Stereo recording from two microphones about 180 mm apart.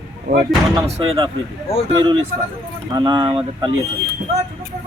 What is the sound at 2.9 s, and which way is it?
Speech, 25° right (ahead or behind).